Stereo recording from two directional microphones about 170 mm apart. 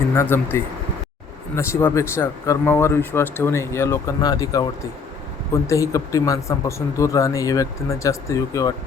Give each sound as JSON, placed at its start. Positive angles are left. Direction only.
{"t": 0.1, "sound": "speech", "side_deg": 15}
{"t": 5.6, "sound": "speech", "side_deg": 20}